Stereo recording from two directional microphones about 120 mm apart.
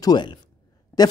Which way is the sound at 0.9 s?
15° left (ahead or behind).